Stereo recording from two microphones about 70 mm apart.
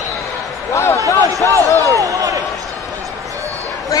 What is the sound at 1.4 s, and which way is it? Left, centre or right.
Speech, left.